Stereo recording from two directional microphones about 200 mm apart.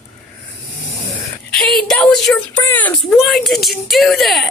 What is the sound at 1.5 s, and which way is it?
A woman's voice, centre (ahead or behind).